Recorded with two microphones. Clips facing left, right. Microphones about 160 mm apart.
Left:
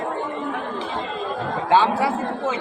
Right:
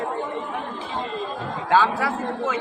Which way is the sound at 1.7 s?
25° left (ahead or behind).